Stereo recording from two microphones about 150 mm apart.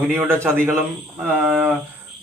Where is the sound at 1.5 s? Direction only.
5° right (ahead or behind).